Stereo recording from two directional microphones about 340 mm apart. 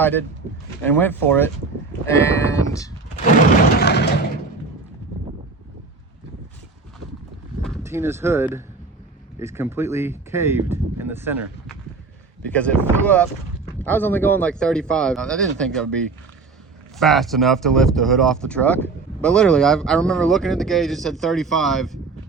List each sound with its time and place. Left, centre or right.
0.0 s speech: centre
3.2 s a sound: left
7.6 s speech: centre
12.5 s speech: centre
17.0 s speech: centre